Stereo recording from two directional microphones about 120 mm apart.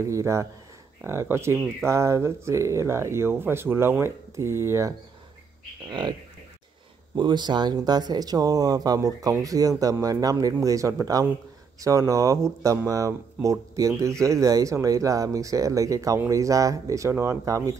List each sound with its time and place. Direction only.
0.0 s speech: 25° right (ahead or behind)
5.9 s speech: 40° right (ahead or behind)
7.2 s speech: 40° right (ahead or behind)